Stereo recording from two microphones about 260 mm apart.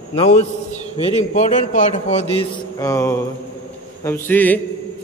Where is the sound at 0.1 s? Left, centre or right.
Left.